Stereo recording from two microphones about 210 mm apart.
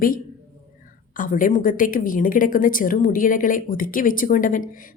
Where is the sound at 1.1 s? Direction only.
40° left (ahead or behind).